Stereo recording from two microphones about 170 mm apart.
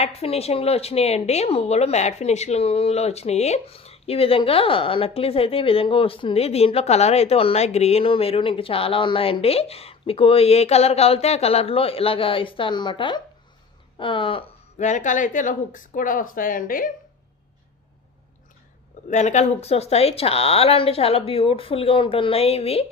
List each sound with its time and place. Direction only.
0.0 s speech: 35° left (ahead or behind)
14.8 s speech: 45° left (ahead or behind)
19.0 s speech: 45° left (ahead or behind)